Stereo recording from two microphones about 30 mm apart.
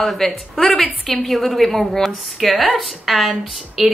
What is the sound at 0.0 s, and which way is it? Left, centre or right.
A woman's voice, centre.